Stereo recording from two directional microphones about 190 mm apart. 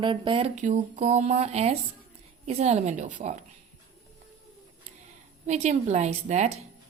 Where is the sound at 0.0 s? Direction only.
25° right (ahead or behind).